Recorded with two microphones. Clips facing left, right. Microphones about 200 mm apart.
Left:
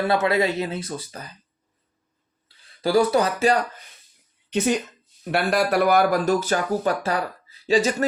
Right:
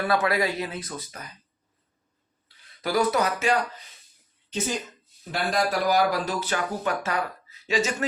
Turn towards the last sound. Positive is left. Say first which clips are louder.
# left 6 dB
turn(degrees=35)  # may be behind; listen again after turning